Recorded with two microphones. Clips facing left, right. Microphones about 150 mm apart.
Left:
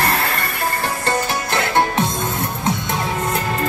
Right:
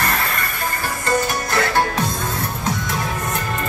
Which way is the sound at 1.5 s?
25° left (ahead or behind).